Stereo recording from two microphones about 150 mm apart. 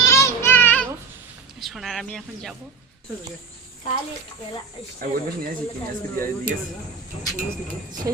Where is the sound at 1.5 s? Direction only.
Centre (ahead or behind).